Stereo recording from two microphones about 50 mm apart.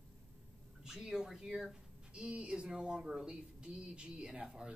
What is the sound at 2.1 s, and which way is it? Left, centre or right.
Speech, right.